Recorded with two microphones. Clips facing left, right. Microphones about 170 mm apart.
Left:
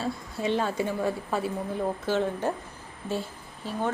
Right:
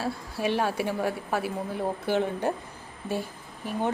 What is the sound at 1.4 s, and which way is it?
Speech, 25° left (ahead or behind).